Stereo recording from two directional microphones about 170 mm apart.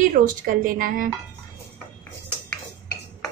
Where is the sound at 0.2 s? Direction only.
55° right (ahead or behind).